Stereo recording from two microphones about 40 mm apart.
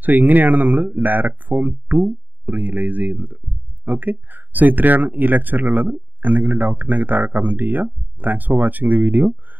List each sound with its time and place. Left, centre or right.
0.0 s speech: right